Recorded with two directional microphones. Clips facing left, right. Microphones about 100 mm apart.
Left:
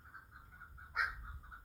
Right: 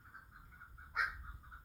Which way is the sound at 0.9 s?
Centre (ahead or behind).